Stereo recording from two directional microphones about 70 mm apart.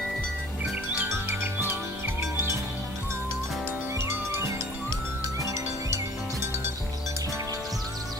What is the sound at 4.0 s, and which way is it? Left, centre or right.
Music, right.